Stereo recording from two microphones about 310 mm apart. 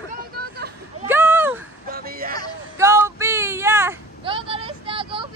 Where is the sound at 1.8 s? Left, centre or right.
Right.